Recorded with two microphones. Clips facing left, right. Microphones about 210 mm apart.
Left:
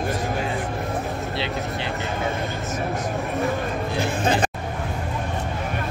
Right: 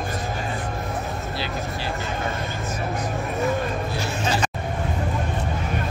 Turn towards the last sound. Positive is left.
turn(degrees=55)  # may be behind; listen again after turning